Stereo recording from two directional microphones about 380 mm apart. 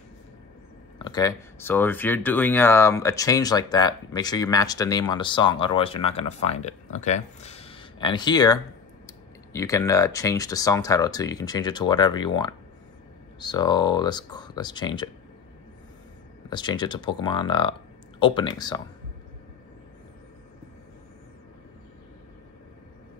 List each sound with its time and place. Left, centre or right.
0.9 s speech: centre
16.4 s speech: centre